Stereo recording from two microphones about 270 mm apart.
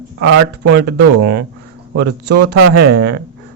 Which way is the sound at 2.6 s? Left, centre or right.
Right.